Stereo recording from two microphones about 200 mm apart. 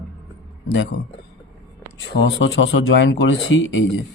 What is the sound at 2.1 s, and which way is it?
Speech, 60° left (ahead or behind).